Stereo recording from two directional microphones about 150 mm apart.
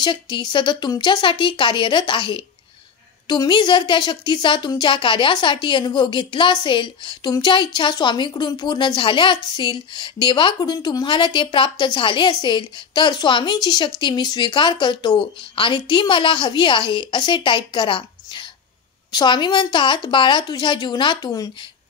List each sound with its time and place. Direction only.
0.0 s a woman's voice: 30° left (ahead or behind)